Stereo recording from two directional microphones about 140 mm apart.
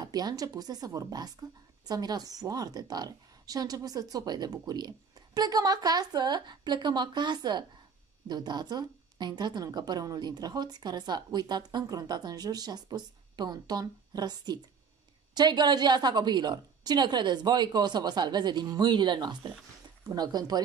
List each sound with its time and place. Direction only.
0.0 s a woman's voice: 30° right (ahead or behind)